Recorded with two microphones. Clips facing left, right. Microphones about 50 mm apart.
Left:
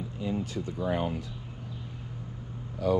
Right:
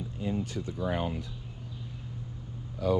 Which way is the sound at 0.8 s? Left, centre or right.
Left.